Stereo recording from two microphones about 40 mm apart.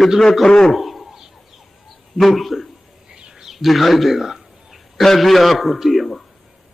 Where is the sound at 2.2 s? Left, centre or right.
Centre.